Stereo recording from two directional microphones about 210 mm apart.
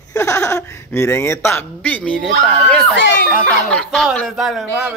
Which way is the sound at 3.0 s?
60° left (ahead or behind).